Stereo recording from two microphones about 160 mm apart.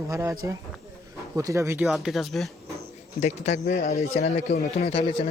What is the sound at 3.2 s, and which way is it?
Speech, 45° left (ahead or behind).